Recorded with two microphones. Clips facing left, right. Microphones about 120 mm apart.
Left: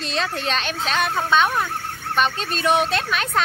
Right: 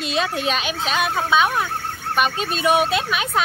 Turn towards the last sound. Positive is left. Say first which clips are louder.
# right 1 dB
turn(degrees=-10)  # may be behind; listen again after turning